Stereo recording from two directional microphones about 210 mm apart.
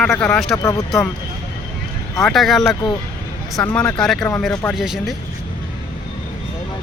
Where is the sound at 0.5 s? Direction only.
15° left (ahead or behind).